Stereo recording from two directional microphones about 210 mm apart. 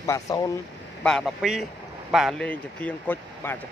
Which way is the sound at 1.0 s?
Centre (ahead or behind).